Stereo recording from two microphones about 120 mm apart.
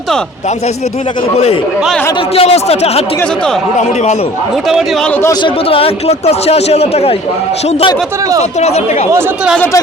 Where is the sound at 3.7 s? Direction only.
70° left (ahead or behind).